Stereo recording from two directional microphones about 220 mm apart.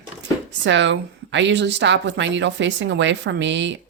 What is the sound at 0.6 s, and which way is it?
A woman's voice, 55° right (ahead or behind).